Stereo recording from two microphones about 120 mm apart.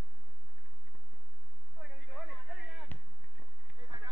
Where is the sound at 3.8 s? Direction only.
35° right (ahead or behind).